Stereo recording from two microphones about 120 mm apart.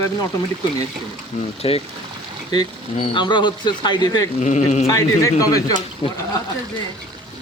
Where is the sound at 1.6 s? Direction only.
50° left (ahead or behind).